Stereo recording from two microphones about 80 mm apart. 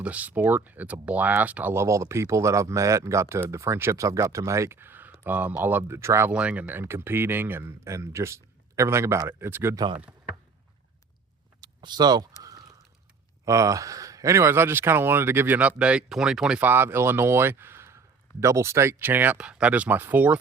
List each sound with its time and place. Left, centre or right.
0.0 s speech: centre
1.7 s speech: right
6.3 s speech: centre
6.7 s speech: right
7.9 s speech: right
11.6 s a sound: right
13.4 s speech: right; by 16.6 s centre
16.6 s speech: right